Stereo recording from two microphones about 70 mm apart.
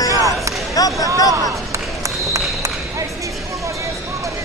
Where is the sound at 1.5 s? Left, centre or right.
Right.